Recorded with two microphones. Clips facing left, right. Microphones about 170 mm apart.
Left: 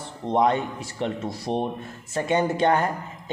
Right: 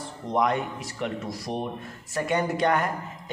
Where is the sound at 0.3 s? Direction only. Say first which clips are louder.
Left 3 dB; 25° left (ahead or behind).